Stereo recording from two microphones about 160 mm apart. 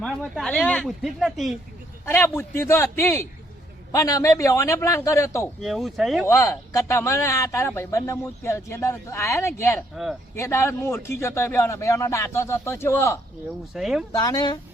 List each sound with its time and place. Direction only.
0.3 s speech: 5° left (ahead or behind)
2.0 s a man's voice: 15° left (ahead or behind)
5.6 s speech: centre (ahead or behind)
6.2 s speech: 15° left (ahead or behind)
9.9 s speech: centre (ahead or behind)
10.3 s speech: 15° left (ahead or behind)
13.7 s speech: 5° right (ahead or behind)
14.1 s a man's voice: 25° left (ahead or behind)